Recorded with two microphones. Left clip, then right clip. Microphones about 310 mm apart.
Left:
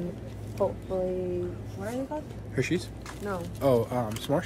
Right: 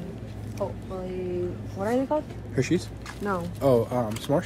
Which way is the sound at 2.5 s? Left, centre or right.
Centre.